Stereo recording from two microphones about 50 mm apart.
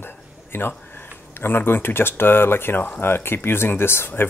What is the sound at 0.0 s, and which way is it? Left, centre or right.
Speech, left.